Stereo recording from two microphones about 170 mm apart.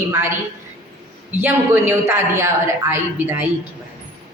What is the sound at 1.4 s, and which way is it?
A man's voice, 10° right (ahead or behind).